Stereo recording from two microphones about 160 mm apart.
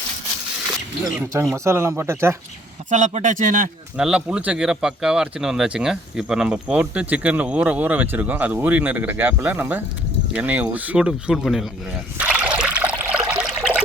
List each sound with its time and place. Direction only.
1.0 s speech: 20° right (ahead or behind)
2.9 s speech: 50° right (ahead or behind)
3.9 s speech: 5° right (ahead or behind)
12.1 s trickle: 5° right (ahead or behind)
12.5 s water: 5° right (ahead or behind)